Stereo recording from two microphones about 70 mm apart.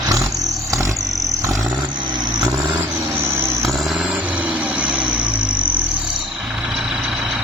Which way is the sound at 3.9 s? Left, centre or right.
Centre.